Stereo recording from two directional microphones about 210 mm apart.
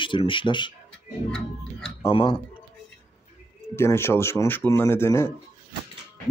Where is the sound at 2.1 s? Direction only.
25° left (ahead or behind).